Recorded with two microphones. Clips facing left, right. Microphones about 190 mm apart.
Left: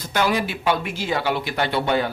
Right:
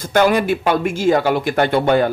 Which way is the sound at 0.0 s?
50° right (ahead or behind).